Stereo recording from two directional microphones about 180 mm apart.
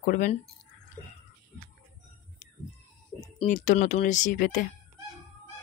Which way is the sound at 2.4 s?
40° left (ahead or behind).